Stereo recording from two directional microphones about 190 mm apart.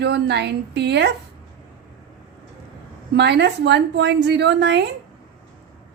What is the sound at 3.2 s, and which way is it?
A woman's voice, 60° right (ahead or behind).